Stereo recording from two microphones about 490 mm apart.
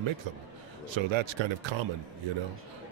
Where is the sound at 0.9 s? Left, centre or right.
Right.